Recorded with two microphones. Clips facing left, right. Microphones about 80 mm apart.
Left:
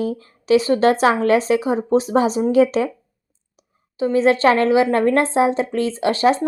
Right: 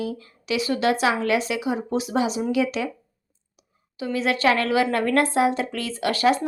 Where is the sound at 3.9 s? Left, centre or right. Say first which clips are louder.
Left 8 dB; left.